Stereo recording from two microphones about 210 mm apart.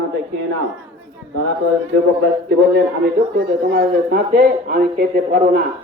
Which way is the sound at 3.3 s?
50° right (ahead or behind).